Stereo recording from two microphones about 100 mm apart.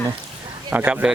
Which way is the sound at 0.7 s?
15° right (ahead or behind).